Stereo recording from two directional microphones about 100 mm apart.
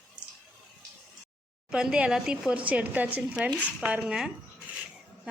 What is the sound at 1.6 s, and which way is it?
A woman's voice, 10° right (ahead or behind).